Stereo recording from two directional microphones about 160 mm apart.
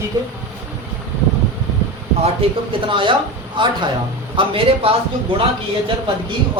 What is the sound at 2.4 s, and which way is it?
Speech, 35° right (ahead or behind).